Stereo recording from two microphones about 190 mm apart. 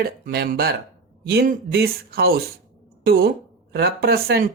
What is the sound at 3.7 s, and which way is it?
Speech, 55° right (ahead or behind).